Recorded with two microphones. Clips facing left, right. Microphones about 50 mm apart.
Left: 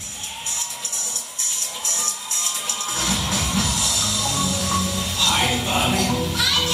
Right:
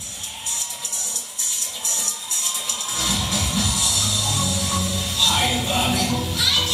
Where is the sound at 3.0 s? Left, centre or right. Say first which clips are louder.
Even; left.